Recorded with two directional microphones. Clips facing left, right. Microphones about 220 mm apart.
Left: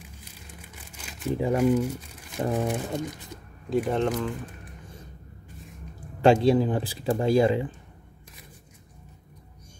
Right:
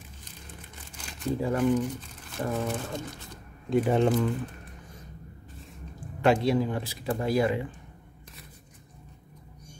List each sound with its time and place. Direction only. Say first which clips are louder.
0.2 s crumpling: even; 10° left (ahead or behind)
1.3 s speech: left 2 dB; 15° left (ahead or behind)
3.7 s speech: right 2 dB; 10° right (ahead or behind)
6.2 s speech: left 4 dB; 30° left (ahead or behind)